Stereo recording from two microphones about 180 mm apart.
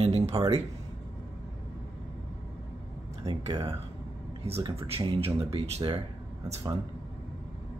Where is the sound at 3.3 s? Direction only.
20° right (ahead or behind).